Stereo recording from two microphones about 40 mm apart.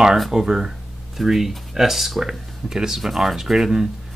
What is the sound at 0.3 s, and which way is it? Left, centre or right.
Speech, centre.